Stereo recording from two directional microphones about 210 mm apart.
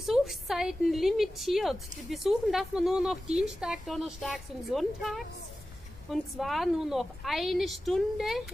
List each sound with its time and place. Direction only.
0.0 s a woman's voice: centre (ahead or behind)